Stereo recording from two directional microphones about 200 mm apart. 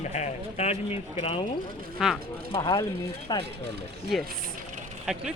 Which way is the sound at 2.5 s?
20° left (ahead or behind).